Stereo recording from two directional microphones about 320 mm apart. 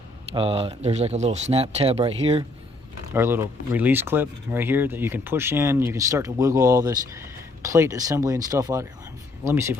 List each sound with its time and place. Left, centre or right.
0.3 s speech: centre
3.1 s speech: centre